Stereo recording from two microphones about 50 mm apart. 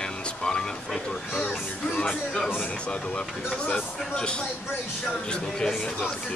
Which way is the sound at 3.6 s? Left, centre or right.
Centre.